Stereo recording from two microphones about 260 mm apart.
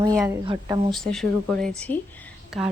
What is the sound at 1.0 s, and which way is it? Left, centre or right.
A woman's voice, centre.